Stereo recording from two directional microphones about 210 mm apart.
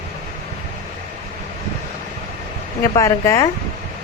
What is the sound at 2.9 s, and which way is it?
Speech, 15° left (ahead or behind).